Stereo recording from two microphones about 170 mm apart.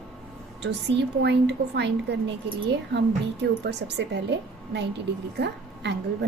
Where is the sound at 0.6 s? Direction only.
85° right.